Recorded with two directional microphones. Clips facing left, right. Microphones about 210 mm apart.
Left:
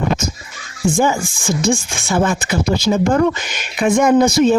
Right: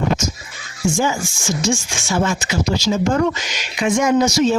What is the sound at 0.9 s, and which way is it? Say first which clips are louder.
Speech: left 3 dB; 55° left (ahead or behind).